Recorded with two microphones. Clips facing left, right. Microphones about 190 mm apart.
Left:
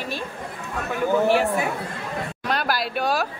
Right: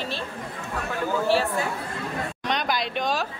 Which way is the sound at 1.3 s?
15° left (ahead or behind).